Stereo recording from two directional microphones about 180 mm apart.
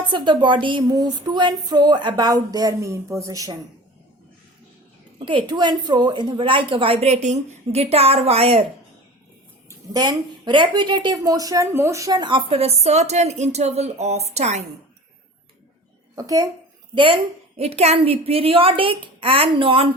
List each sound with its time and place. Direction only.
0.1 s a woman's voice: 25° right (ahead or behind)
5.2 s a woman's voice: 25° right (ahead or behind)
9.6 s a woman's voice: 20° right (ahead or behind); by 14.7 s 40° right (ahead or behind)
16.1 s a woman's voice: 20° right (ahead or behind)